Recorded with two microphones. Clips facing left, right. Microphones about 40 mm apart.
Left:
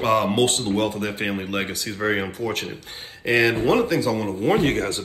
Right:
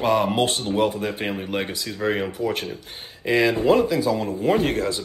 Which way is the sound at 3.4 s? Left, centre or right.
Left.